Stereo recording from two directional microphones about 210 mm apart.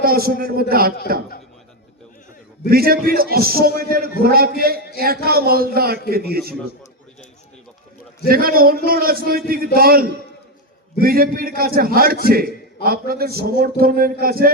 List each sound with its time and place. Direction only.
0.0 s a man's voice: 45° right (ahead or behind)
2.6 s a man's voice: 45° right (ahead or behind)
8.3 s a man's voice: 45° right (ahead or behind)